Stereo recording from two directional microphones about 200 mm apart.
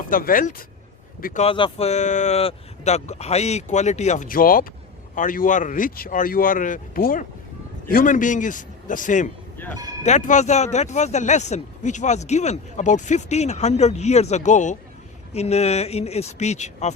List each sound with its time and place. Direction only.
0.1 s speech: 45° left (ahead or behind)